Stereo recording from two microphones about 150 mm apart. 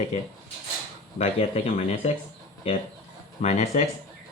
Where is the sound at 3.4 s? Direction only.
50° left (ahead or behind).